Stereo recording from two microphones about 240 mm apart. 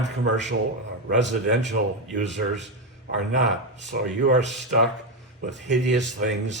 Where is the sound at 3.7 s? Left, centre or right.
Right.